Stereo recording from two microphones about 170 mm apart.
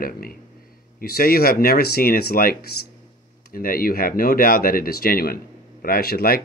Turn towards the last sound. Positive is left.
turn(degrees=65)  # may be behind; listen again after turning